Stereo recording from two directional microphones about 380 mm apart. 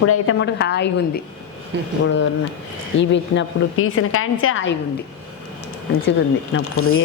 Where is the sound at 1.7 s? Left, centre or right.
Right.